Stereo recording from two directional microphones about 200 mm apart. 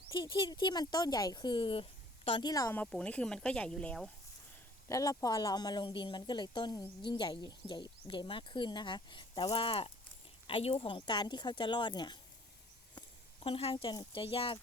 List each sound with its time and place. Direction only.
0.1 s speech: 25° left (ahead or behind); by 4.1 s 5° left (ahead or behind)
4.9 s speech: 15° left (ahead or behind)